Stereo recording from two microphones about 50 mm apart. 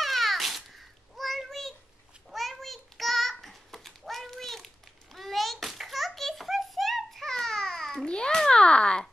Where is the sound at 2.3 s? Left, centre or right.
Centre.